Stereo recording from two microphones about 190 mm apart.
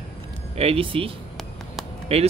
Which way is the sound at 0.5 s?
30° right (ahead or behind).